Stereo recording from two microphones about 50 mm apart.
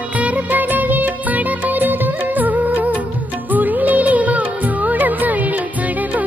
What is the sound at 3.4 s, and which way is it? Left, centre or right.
Music, right.